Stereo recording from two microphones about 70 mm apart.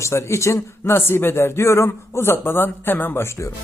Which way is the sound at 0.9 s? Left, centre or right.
Left.